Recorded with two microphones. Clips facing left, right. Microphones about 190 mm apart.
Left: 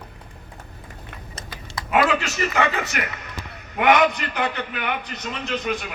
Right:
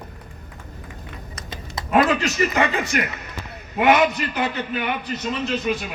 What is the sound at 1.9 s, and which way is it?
Speech, 40° right (ahead or behind).